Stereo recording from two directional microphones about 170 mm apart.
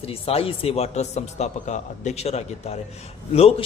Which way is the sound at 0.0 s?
35° left (ahead or behind).